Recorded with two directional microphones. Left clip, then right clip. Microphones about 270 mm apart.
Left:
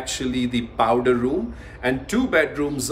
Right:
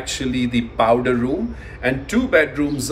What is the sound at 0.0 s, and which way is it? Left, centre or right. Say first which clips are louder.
Speech: right 2 dB; centre.